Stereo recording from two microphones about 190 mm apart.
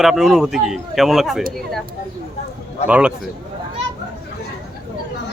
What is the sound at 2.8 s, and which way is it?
Speech, 5° right (ahead or behind).